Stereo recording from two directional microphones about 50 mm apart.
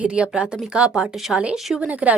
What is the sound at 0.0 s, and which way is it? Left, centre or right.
Speech, right.